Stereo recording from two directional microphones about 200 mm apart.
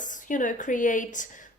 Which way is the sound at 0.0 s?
40° left (ahead or behind).